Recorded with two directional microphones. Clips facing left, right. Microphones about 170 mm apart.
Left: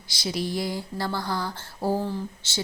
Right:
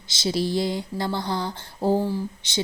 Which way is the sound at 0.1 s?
25° right (ahead or behind).